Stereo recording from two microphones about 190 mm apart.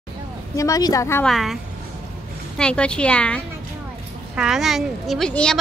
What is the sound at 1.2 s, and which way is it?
Speech, centre (ahead or behind).